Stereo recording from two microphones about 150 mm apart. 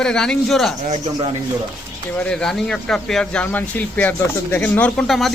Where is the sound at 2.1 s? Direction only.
5° left (ahead or behind).